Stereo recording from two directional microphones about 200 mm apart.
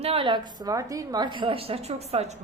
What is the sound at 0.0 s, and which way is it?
A woman's voice, 25° right (ahead or behind).